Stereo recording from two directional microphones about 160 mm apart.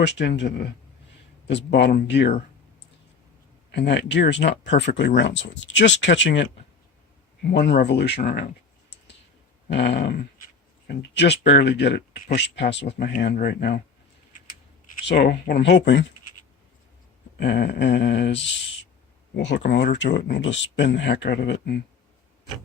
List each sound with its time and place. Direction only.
0.0 s speech: 90° left
3.7 s speech: 90° left
9.6 s dog: 90° left
10.8 s speech: 90° left
13.3 s speech: 75° left (ahead or behind)
15.0 s speech: 90° left
17.3 s speech: 90° left
19.4 s speech: 90° left